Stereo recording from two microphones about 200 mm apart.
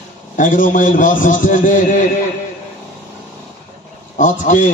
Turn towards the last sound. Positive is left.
turn(degrees=40)  # may be behind; listen again after turning